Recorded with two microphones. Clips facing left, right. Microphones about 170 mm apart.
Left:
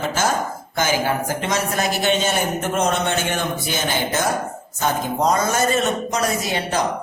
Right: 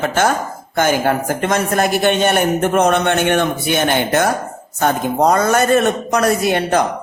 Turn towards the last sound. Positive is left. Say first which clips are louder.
# right 7 dB
turn(degrees=-55)  # may be behind; listen again after turning